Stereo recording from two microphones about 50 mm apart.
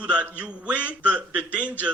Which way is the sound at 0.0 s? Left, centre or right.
Right.